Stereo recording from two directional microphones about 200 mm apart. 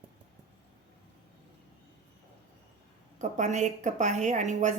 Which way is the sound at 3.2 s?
35° right (ahead or behind).